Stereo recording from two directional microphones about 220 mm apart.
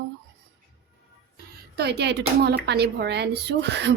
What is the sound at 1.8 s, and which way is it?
A woman's voice, 50° right (ahead or behind).